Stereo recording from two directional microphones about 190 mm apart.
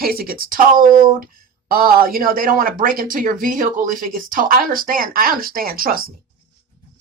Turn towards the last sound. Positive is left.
turn(degrees=-50)  # may be behind; listen again after turning